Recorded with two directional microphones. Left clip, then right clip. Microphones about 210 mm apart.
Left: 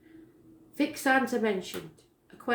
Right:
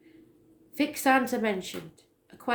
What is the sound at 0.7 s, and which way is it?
Speech, 40° right (ahead or behind).